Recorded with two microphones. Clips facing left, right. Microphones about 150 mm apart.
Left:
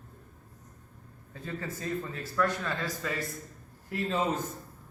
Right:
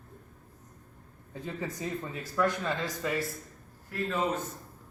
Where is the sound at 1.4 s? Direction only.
15° right (ahead or behind).